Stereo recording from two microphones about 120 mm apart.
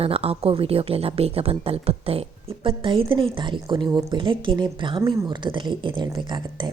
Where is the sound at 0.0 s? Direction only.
55° right (ahead or behind).